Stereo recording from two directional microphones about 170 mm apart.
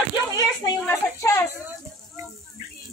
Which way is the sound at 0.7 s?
15° left (ahead or behind).